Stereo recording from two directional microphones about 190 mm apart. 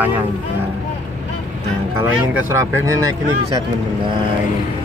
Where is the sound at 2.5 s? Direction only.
15° right (ahead or behind).